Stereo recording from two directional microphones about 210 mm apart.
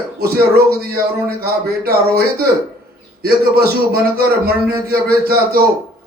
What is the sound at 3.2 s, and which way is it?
Speech, 45° right (ahead or behind).